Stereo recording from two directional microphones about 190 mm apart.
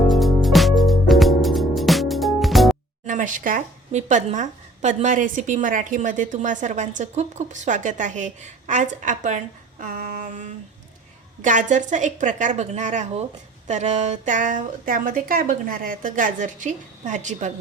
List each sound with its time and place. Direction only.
0.1 s music: centre (ahead or behind)
3.1 s speech: 45° right (ahead or behind)